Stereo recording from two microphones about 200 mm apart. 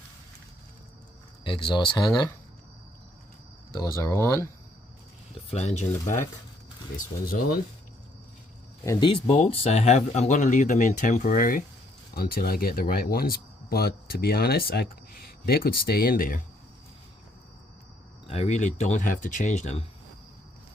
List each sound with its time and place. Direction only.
1.5 s speech: 25° left (ahead or behind)
3.8 s speech: 15° left (ahead or behind)
5.5 s speech: 35° left (ahead or behind)
8.8 s speech: 20° left (ahead or behind); by 16.4 s 45° left (ahead or behind)
18.3 s speech: 30° left (ahead or behind)